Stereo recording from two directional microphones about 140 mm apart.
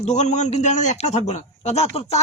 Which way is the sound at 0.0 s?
60° left (ahead or behind).